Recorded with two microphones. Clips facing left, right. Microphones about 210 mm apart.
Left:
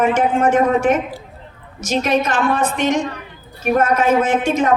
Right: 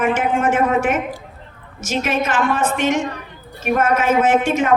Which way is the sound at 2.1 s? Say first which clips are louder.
Left 2 dB; 35° left (ahead or behind).